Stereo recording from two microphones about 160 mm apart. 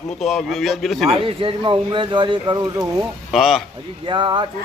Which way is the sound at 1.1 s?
35° right (ahead or behind).